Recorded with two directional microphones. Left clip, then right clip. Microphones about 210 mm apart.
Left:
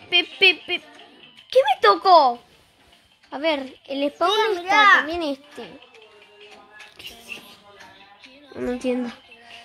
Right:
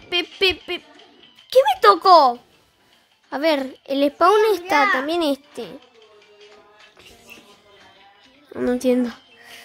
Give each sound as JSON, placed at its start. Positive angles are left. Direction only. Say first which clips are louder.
{"t": 0.4, "sound": "a sound", "louder": "left 2 dB", "side_deg": -20}
{"t": 3.3, "sound": "a woman's voice", "louder": "right 4 dB", "side_deg": -40}
{"t": 8.5, "sound": "speech", "louder": "right 6 dB", "side_deg": -30}